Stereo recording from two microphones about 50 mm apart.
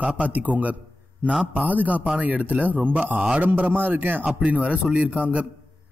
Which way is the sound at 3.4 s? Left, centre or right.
Right.